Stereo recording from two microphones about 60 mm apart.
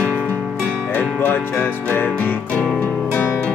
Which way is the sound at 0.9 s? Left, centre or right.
Left.